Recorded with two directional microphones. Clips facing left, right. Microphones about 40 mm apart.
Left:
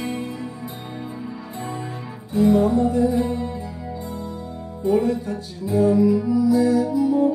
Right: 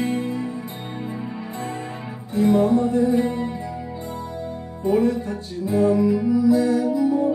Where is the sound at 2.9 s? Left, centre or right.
Right.